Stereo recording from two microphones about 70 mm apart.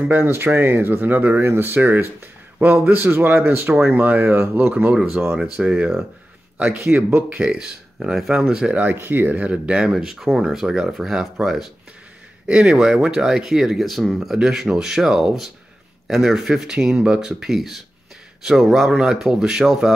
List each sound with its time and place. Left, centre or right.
0.1 s speech: right
5.4 s speech: centre
6.6 s speech: right
7.2 s speech: centre
8.9 s speech: right; by 11.7 s centre
12.4 s speech: centre